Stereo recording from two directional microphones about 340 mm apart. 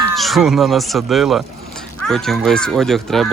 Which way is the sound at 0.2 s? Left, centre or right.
Centre.